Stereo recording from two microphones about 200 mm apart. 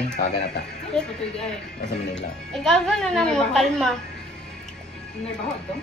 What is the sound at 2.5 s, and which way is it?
A woman's voice, centre (ahead or behind).